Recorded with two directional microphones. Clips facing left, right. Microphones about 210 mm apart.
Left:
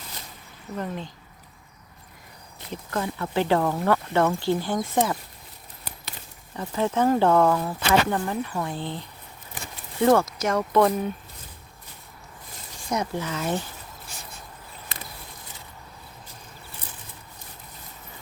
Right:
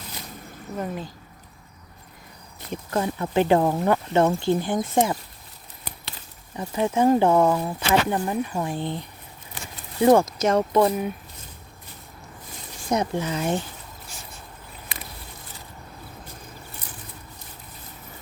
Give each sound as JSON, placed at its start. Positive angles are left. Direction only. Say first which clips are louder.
{"t": 0.8, "sound": "speech", "louder": "right 1 dB", "side_deg": -5}
{"t": 2.9, "sound": "speech", "louder": "right 3 dB", "side_deg": -20}
{"t": 6.6, "sound": "speech", "louder": "right 2 dB", "side_deg": -15}
{"t": 10.8, "sound": "speech", "louder": "even", "side_deg": -10}
{"t": 12.9, "sound": "speech", "louder": "right 4 dB", "side_deg": -20}